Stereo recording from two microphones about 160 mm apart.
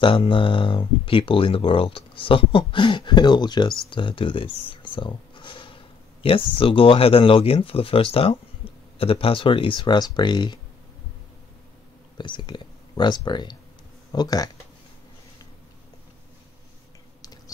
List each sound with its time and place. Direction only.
0.0 s speech: 30° left (ahead or behind)
12.2 s speech: 30° left (ahead or behind)